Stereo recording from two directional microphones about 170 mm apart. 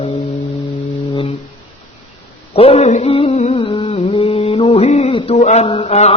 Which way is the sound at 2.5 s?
35° left (ahead or behind).